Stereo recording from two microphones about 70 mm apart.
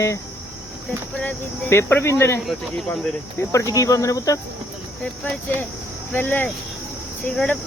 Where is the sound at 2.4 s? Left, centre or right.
Centre.